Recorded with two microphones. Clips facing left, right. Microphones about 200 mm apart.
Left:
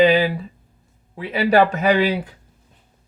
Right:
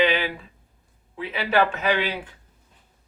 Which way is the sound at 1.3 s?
40° left (ahead or behind).